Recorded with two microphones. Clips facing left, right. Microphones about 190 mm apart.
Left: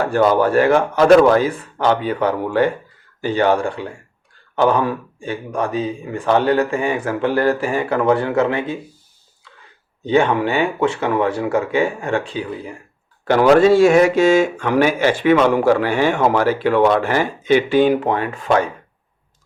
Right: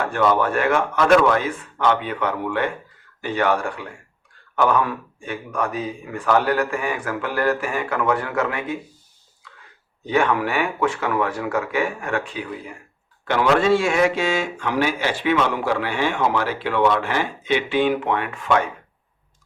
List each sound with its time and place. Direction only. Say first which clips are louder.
0.0 s a man's voice: left 5 dB; 35° left (ahead or behind)
10.1 s speech: left 4 dB; 25° left (ahead or behind)
13.2 s speech: left 7 dB; 40° left (ahead or behind)